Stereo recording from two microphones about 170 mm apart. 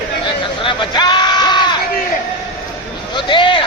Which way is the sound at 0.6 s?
25° left (ahead or behind).